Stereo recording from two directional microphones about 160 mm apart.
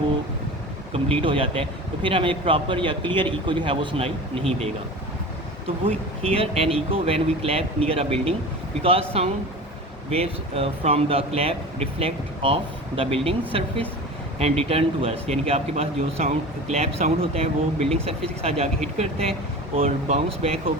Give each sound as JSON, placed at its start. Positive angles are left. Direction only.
{"t": 0.9, "sound": "a man's voice", "side_deg": -35}
{"t": 6.2, "sound": "a man's voice", "side_deg": -35}